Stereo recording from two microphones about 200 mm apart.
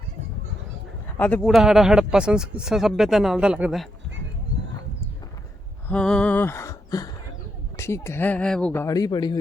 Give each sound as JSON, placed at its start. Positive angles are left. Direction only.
{"t": 1.2, "sound": "speech", "side_deg": 5}
{"t": 4.5, "sound": "clip-clop", "side_deg": -60}
{"t": 5.9, "sound": "a sound", "side_deg": 5}
{"t": 7.8, "sound": "speech", "side_deg": 15}